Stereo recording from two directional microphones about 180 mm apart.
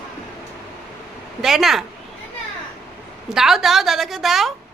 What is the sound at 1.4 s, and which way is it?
Speech, centre (ahead or behind).